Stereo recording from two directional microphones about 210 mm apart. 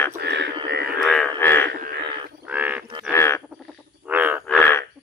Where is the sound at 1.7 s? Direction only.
50° right (ahead or behind).